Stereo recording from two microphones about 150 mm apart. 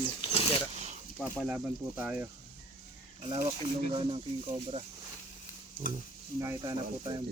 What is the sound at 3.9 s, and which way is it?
Speech, 35° right (ahead or behind).